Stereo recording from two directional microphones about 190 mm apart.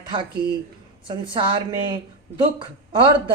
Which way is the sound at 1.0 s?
25° right (ahead or behind).